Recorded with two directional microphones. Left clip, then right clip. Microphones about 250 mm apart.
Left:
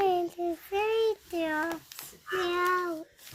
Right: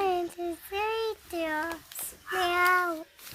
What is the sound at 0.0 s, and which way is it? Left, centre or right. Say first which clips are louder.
Child singing: left 2 dB; centre.